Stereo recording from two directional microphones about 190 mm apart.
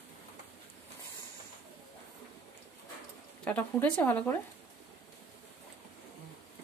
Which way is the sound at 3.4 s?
10° left (ahead or behind).